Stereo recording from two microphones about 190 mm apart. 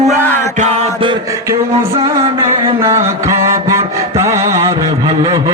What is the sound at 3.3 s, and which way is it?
Mantra, 15° right (ahead or behind).